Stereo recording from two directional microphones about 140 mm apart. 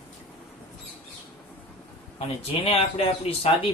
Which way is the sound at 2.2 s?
45° left (ahead or behind).